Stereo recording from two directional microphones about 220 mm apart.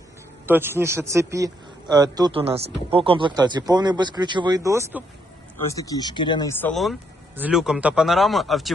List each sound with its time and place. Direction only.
0.4 s a man's voice: 10° right (ahead or behind)
5.6 s speech: 15° left (ahead or behind)
6.6 s speech: 5° left (ahead or behind)